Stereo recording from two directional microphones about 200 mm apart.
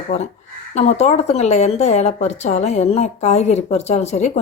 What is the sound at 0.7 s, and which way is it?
Speech, 35° left (ahead or behind).